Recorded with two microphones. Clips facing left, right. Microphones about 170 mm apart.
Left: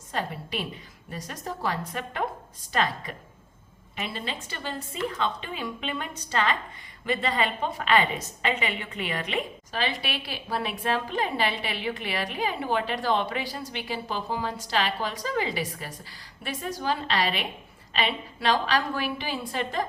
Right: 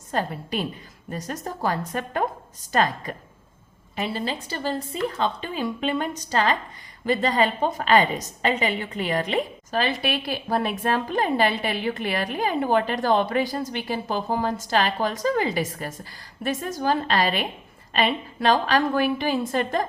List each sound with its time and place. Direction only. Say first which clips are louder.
0.1 s a woman's voice: right 5 dB; 45° right (ahead or behind)